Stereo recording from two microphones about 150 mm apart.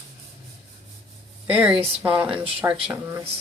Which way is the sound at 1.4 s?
10° right (ahead or behind).